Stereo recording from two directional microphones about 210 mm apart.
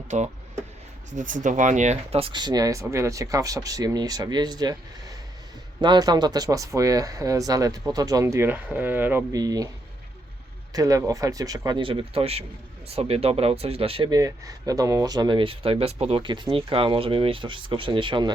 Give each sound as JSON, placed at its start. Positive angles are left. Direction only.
{"t": 0.1, "sound": "speech", "side_deg": -35}
{"t": 10.7, "sound": "speech", "side_deg": -15}